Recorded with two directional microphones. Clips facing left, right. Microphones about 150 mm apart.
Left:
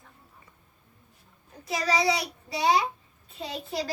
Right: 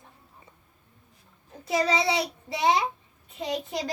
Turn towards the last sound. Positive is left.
turn(degrees=-20)  # may be behind; listen again after turning